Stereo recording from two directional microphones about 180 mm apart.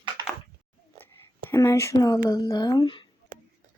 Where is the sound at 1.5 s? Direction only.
15° left (ahead or behind).